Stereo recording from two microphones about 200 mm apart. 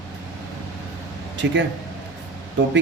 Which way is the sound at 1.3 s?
65° right (ahead or behind).